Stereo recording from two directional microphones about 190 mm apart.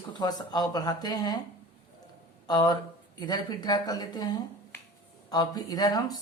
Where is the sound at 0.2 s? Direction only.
20° left (ahead or behind).